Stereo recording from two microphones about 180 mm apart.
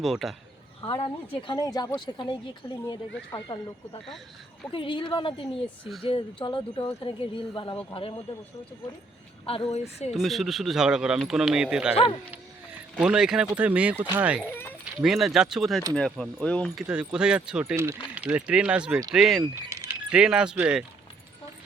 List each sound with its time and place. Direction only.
0.0 s speech: centre (ahead or behind)
0.8 s speech: 30° left (ahead or behind)
3.3 s speech: 25° left (ahead or behind)
9.5 s a woman's voice: 30° left (ahead or behind)
10.1 s speech: centre (ahead or behind)
13.0 s speech: 5° right (ahead or behind)
14.5 s a sound: 10° left (ahead or behind)
14.9 s speech: centre (ahead or behind)
19.7 s speech: 15° right (ahead or behind)